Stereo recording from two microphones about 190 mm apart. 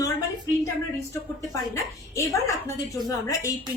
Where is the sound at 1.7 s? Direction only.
15° left (ahead or behind).